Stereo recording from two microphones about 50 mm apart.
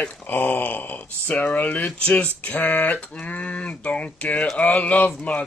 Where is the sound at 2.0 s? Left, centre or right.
Left.